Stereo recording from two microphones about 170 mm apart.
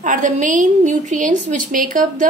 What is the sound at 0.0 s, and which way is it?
A woman's voice, 50° right (ahead or behind).